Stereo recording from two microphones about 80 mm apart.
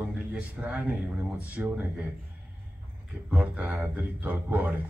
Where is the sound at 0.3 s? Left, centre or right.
Centre.